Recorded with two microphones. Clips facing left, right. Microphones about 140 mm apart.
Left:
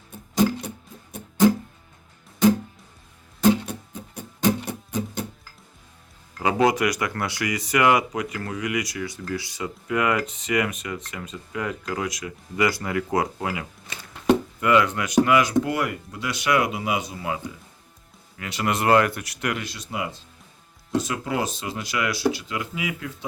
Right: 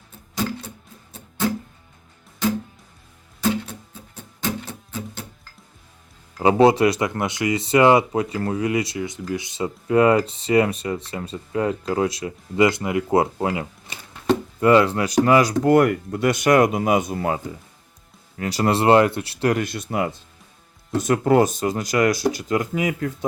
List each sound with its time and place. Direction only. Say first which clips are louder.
3.7 s music: left 4 dB; 15° left (ahead or behind)
6.4 s speech: right 6 dB; 30° right (ahead or behind)
15.6 s speech: right 10 dB; 50° right (ahead or behind)
18.3 s speech: right 6 dB; 35° right (ahead or behind)
19.5 s speech: right 7 dB; 50° right (ahead or behind)